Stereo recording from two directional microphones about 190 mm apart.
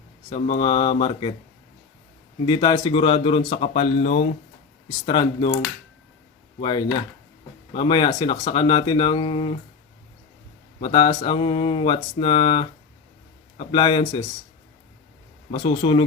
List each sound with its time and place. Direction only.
0.6 s mantra: 25° left (ahead or behind)
2.5 s mantra: 25° left (ahead or behind)
4.9 s mantra: 25° left (ahead or behind)
6.6 s mantra: 25° left (ahead or behind)
10.8 s mantra: 25° left (ahead or behind)
15.5 s mantra: 25° left (ahead or behind)